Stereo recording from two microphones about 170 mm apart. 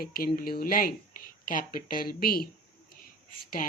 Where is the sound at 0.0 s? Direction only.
60° left (ahead or behind).